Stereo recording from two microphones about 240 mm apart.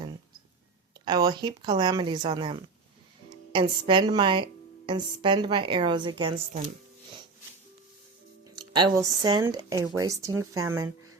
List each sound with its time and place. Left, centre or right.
1.0 s a woman's voice: centre
8.4 s speech: centre